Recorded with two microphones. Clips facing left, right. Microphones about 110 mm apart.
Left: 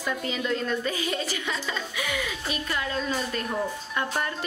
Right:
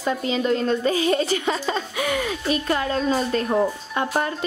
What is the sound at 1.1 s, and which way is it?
A woman's voice, 45° right (ahead or behind).